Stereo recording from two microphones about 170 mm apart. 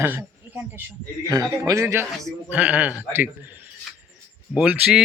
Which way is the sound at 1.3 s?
20° right (ahead or behind).